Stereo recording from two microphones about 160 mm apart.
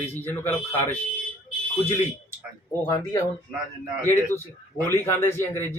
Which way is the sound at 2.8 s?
20° left (ahead or behind).